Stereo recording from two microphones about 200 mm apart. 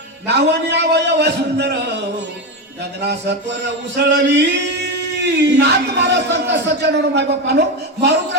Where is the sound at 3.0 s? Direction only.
60° right (ahead or behind).